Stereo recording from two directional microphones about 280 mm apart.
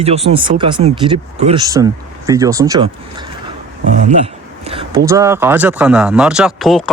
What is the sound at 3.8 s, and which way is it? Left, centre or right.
Speech, right.